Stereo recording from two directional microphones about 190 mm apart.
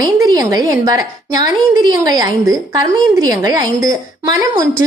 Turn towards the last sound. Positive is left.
turn(degrees=-20)  # may be behind; listen again after turning